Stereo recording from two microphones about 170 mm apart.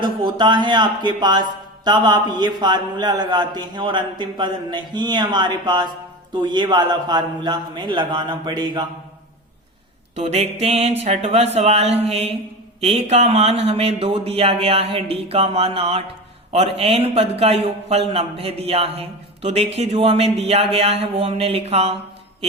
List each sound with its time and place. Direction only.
0.0 s a man's voice: 25° right (ahead or behind)
10.2 s a man's voice: 40° right (ahead or behind)